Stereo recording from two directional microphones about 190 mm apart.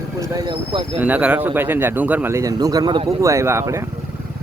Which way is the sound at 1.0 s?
10° right (ahead or behind).